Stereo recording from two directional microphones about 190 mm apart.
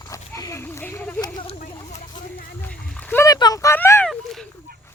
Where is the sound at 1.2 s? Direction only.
25° left (ahead or behind).